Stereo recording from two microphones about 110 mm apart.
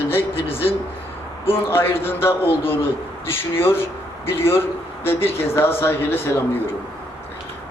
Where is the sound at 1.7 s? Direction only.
20° left (ahead or behind).